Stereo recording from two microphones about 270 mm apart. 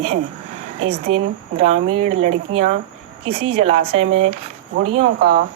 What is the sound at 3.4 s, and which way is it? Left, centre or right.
Speech, right.